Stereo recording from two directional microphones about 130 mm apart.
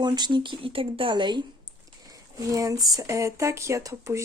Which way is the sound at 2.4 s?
25° right (ahead or behind).